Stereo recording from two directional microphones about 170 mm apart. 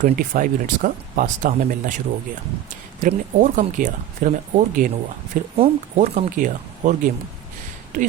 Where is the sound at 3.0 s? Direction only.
50° right (ahead or behind).